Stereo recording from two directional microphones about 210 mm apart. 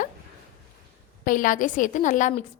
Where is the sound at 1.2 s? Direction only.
40° left (ahead or behind).